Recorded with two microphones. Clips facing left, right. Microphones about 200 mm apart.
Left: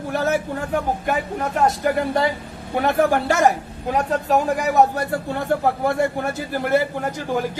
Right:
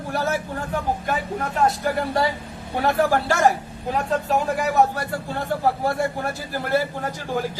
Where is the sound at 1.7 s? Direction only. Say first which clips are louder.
Left 3 dB; 20° left (ahead or behind).